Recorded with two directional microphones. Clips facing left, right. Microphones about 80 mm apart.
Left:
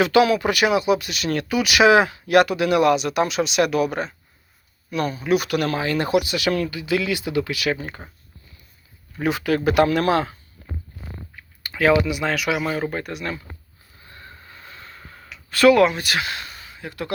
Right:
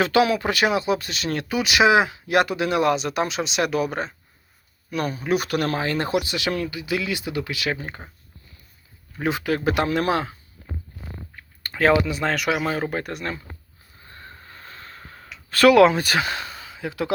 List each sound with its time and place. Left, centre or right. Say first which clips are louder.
0.0 s speech: left 2 dB; right
9.1 s speech: left 2 dB; right
11.6 s speech: left 1 dB; right
12.9 s speech: right 1 dB; right
14.0 s a sound: even; right